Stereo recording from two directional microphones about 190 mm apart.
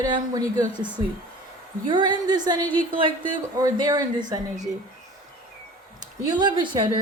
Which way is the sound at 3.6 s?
20° right (ahead or behind).